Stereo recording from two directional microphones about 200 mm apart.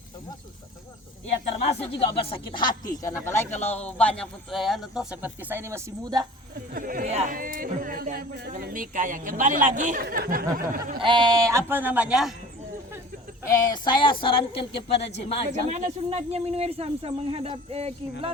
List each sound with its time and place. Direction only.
1.8 s speech: 30° left (ahead or behind)
3.0 s a man's voice: 15° left (ahead or behind); by 6.2 s 15° right (ahead or behind)
6.7 s speech: 45° right (ahead or behind)
7.1 s speech: 30° right (ahead or behind)
7.3 s speech: 45° right (ahead or behind)
11.0 s speech: 20° right (ahead or behind); by 12.3 s 5° right (ahead or behind)
13.4 s speech: 15° left (ahead or behind)
14.7 s speech: 60° left (ahead or behind)
15.1 s a woman's voice: 30° left (ahead or behind)
15.4 s speech: 35° right (ahead or behind)